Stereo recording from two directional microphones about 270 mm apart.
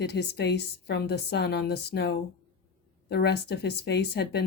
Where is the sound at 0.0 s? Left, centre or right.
Left.